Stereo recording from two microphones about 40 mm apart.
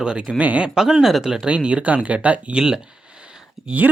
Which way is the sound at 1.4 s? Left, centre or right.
Right.